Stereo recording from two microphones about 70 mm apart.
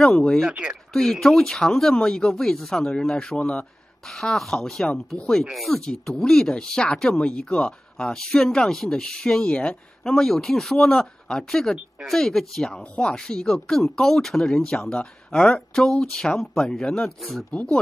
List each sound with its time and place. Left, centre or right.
0.0 s speech: centre
0.5 s speech: centre
0.9 s speech: centre
4.8 s speech: centre
5.4 s speech: centre